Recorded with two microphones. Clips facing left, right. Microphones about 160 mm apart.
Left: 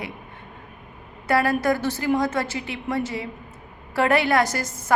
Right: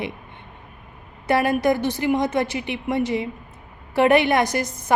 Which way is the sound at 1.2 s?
20° right (ahead or behind).